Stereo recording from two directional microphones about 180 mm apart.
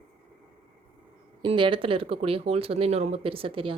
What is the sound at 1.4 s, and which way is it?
Speech, 30° right (ahead or behind).